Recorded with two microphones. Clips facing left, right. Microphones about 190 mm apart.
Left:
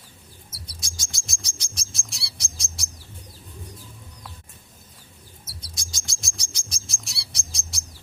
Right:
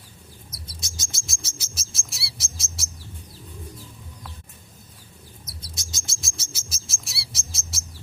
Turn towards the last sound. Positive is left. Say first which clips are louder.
# right 2 dB
turn(degrees=-5)  # may be behind; listen again after turning